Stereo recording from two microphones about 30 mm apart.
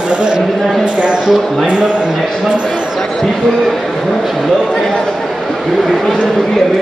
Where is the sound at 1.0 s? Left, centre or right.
Right.